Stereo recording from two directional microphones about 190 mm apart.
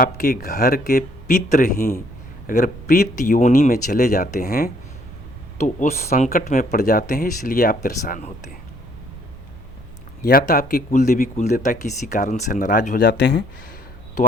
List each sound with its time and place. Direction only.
0.0 s speech: 50° left (ahead or behind)
5.5 s speech: 40° left (ahead or behind)
10.2 s speech: 55° left (ahead or behind)
13.1 s speech: 65° left (ahead or behind)